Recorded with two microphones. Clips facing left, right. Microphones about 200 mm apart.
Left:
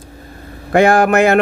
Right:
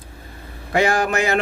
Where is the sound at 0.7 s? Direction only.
55° left (ahead or behind).